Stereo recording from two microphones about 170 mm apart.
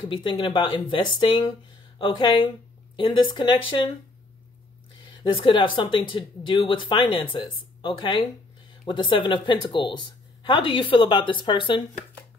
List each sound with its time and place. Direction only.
0.1 s speech: 30° left (ahead or behind)
5.0 s speech: 30° left (ahead or behind)